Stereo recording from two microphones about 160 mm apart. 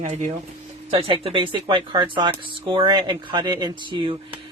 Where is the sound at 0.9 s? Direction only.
35° right (ahead or behind).